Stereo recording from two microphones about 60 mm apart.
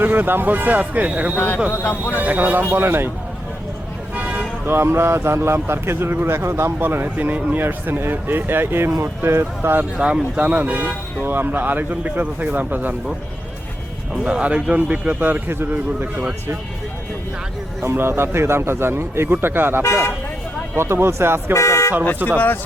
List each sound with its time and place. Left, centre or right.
0.0 s speech: right
4.1 s speech: right
6.7 s speech: right
10.3 s speech: right
14.1 s speech: centre; by 16.6 s right
17.8 s speech: right
19.8 s speech: left
20.7 s speech: right
21.5 s speech: left
22.2 s speech: right